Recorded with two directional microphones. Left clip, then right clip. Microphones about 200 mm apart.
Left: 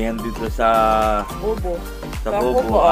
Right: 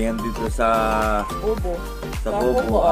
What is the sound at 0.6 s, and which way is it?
Music, 15° right (ahead or behind).